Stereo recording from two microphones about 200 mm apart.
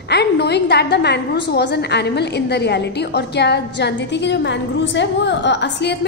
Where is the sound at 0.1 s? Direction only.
55° left (ahead or behind).